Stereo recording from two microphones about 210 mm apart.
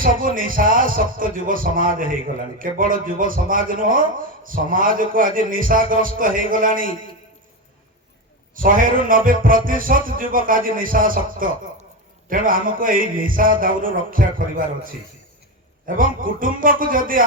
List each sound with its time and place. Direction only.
0.0 s a man's voice: 40° right (ahead or behind)
8.5 s a man's voice: 40° right (ahead or behind)